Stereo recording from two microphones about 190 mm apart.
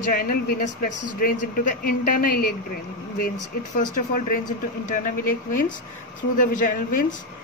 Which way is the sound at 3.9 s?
45° left (ahead or behind).